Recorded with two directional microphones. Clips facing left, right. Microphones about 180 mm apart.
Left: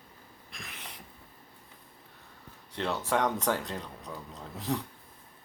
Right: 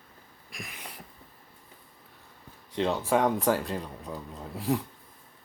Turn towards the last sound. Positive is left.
turn(degrees=-10)  # may be behind; listen again after turning